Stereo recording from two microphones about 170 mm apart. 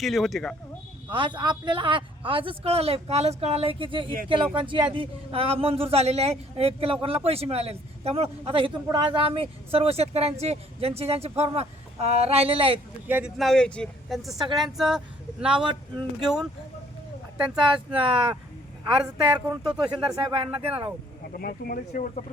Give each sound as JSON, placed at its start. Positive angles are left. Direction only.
{"t": 0.0, "sound": "speech", "side_deg": 0}
{"t": 1.1, "sound": "a man's voice", "side_deg": -30}
{"t": 13.1, "sound": "speech", "side_deg": -10}
{"t": 13.3, "sound": "speech", "side_deg": 0}
{"t": 15.6, "sound": "a woman's voice", "side_deg": -25}
{"t": 16.2, "sound": "speech", "side_deg": 0}
{"t": 17.6, "sound": "a woman's voice", "side_deg": -30}
{"t": 19.6, "sound": "speech", "side_deg": -5}
{"t": 20.2, "sound": "a man's voice", "side_deg": -30}
{"t": 21.3, "sound": "speech", "side_deg": 60}